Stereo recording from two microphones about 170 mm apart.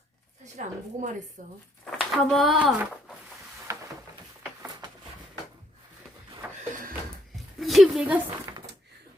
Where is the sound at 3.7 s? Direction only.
15° right (ahead or behind).